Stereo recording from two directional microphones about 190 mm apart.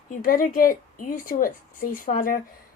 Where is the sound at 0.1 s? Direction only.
45° left (ahead or behind).